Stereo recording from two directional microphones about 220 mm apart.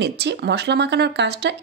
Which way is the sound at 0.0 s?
50° right (ahead or behind).